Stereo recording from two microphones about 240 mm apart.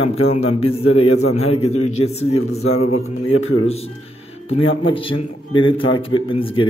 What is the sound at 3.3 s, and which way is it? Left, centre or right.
Speech, left.